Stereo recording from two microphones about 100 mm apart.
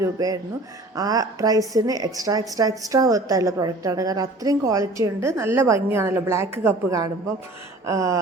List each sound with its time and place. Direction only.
0.0 s a woman's voice: 35° right (ahead or behind)